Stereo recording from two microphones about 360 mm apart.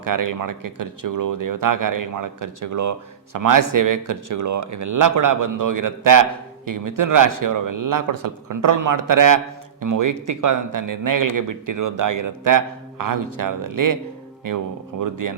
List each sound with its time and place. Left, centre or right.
0.0 s speech: right